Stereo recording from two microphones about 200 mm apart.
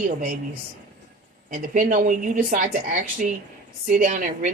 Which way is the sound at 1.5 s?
40° right (ahead or behind).